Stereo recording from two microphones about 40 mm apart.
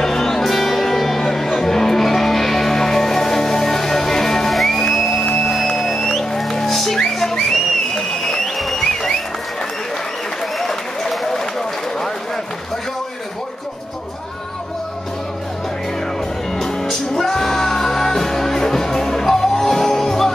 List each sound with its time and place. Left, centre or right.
0.0 s music: centre
5.2 s music: centre
5.5 s music: centre
7.1 s a sound: centre
10.6 s applause: centre
17.2 s music: centre